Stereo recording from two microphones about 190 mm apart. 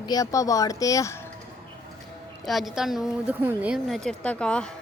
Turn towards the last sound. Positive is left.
turn(degrees=5)  # may be behind; listen again after turning